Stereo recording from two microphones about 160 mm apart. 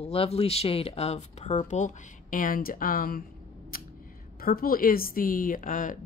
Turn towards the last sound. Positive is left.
turn(degrees=55)  # may be behind; listen again after turning